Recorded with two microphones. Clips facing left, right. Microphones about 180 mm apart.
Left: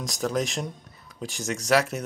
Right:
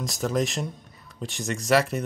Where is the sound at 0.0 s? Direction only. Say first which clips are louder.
Right 1 dB; centre (ahead or behind).